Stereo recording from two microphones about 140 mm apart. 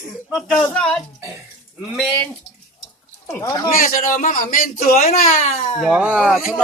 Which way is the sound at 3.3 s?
20° left (ahead or behind).